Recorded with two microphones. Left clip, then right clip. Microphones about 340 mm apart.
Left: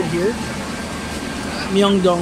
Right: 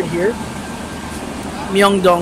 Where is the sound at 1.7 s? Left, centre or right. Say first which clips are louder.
Right 4 dB; right.